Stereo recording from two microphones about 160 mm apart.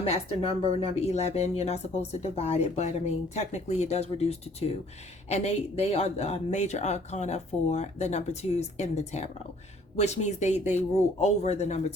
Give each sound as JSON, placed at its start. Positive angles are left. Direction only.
{"t": 0.0, "sound": "speech", "side_deg": 40}